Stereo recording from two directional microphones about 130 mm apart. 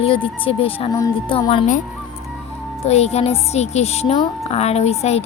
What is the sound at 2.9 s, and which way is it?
Speech, 55° left (ahead or behind).